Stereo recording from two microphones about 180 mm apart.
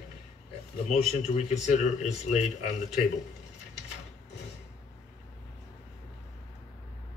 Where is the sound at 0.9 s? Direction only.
35° left (ahead or behind).